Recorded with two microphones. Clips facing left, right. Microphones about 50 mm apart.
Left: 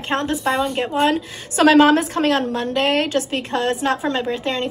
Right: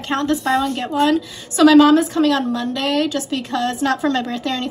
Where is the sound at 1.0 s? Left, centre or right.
Left.